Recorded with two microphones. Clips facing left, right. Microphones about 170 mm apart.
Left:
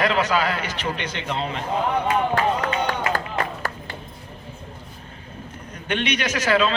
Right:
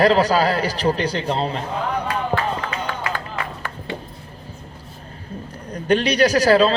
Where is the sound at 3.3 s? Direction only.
40° left (ahead or behind).